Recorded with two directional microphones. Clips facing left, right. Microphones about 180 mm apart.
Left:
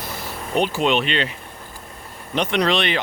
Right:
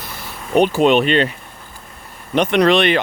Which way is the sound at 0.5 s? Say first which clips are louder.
Right 7 dB; 50° right (ahead or behind).